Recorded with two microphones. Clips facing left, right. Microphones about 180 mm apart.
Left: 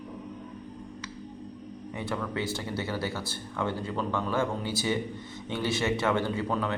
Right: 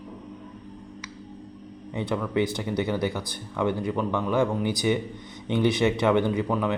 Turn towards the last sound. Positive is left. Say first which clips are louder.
# right 4 dB
turn(degrees=-15)  # may be behind; listen again after turning